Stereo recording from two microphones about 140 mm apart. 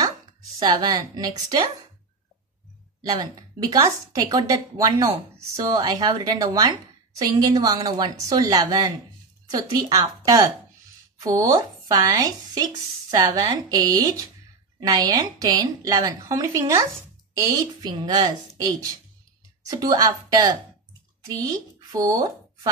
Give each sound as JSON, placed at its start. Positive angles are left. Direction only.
{"t": 0.6, "sound": "speech", "side_deg": -30}
{"t": 3.0, "sound": "speech", "side_deg": -25}